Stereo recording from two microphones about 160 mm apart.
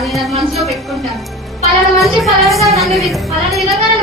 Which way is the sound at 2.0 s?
Centre (ahead or behind).